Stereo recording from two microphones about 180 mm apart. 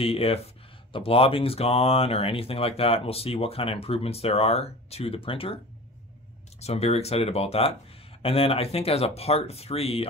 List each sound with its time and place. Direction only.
0.0 s speech: 35° left (ahead or behind)
6.6 s speech: 35° left (ahead or behind)